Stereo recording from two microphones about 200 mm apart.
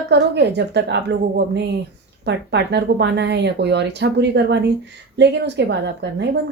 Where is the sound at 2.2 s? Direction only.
60° right (ahead or behind).